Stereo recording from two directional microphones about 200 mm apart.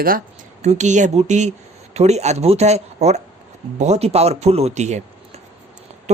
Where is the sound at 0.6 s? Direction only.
35° right (ahead or behind).